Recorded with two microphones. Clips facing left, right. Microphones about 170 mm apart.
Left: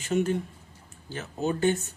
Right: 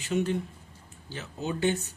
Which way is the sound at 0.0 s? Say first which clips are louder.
Left 2 dB; 45° left (ahead or behind).